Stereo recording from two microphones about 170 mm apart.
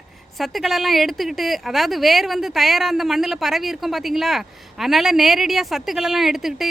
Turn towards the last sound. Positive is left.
turn(degrees=0)  # may be behind; listen again after turning